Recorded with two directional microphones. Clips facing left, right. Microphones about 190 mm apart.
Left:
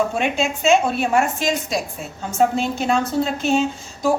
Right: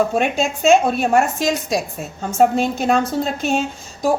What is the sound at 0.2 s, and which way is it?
A woman's voice, 45° right (ahead or behind).